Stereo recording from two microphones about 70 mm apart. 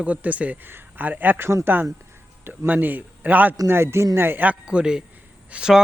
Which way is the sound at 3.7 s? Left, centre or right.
Right.